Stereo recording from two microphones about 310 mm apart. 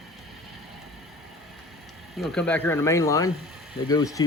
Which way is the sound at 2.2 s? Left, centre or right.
Centre.